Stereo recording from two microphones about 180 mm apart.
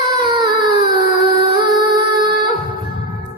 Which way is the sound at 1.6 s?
25° right (ahead or behind).